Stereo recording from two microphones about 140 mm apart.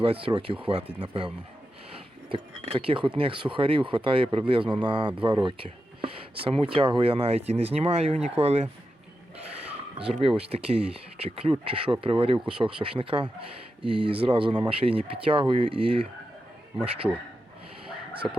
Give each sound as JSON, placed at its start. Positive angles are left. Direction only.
{"t": 0.0, "sound": "speech", "side_deg": -40}
{"t": 2.3, "sound": "speech", "side_deg": -40}
{"t": 10.1, "sound": "speech", "side_deg": -40}
{"t": 17.0, "sound": "a man's voice", "side_deg": -5}